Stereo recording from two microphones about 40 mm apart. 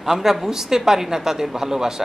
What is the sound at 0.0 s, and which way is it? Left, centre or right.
A woman's voice, centre.